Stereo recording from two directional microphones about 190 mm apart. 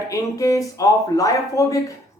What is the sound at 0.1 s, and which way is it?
Speech, 15° left (ahead or behind).